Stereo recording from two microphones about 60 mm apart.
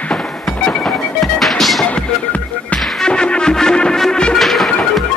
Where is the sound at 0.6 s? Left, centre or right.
Centre.